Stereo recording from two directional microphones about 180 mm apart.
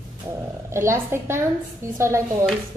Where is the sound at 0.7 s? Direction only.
15° right (ahead or behind).